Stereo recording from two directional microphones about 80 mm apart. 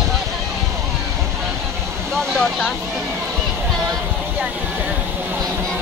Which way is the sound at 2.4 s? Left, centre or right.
Centre.